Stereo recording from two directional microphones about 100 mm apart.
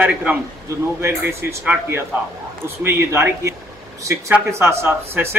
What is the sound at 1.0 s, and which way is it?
A man's voice, 25° right (ahead or behind).